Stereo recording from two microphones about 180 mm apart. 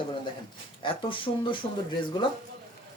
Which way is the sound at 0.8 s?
30° left (ahead or behind).